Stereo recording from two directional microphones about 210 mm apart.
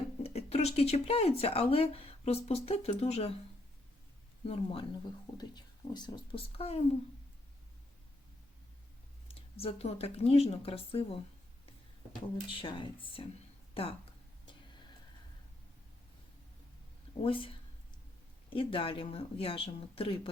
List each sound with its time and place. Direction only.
0.2 s speech: 30° left (ahead or behind)
4.4 s speech: 25° left (ahead or behind)
9.6 s speech: 30° left (ahead or behind)
12.5 s speech: 25° left (ahead or behind)
17.2 s speech: 25° left (ahead or behind)